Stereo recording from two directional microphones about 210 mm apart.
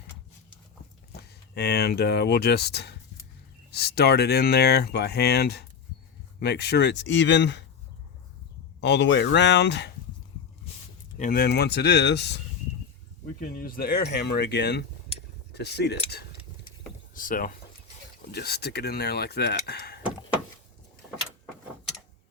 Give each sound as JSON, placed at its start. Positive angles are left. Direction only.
{"t": 1.1, "sound": "speech", "side_deg": 50}
{"t": 8.8, "sound": "speech", "side_deg": 55}
{"t": 11.2, "sound": "speech", "side_deg": 45}
{"t": 17.2, "sound": "speech", "side_deg": 40}